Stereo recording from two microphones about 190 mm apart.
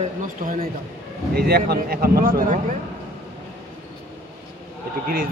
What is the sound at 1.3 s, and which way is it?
A man's voice, 55° right (ahead or behind).